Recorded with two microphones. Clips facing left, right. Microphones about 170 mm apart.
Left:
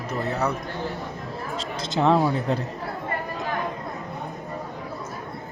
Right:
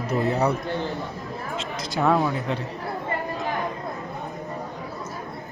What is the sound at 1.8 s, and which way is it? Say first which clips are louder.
Speech: left 2 dB; 25° left (ahead or behind).